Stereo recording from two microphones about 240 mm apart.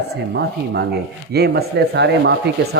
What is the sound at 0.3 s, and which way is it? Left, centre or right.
A man's voice, right.